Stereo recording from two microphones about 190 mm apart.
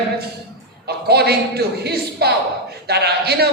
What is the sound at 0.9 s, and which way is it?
A man's voice, 55° right (ahead or behind).